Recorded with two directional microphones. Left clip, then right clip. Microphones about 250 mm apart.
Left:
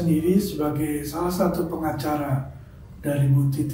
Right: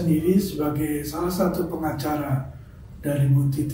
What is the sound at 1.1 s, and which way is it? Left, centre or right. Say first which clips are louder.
Speech: left 1 dB; centre.